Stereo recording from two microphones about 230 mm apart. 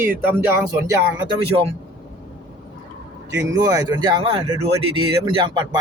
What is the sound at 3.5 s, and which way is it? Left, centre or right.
Speech, centre.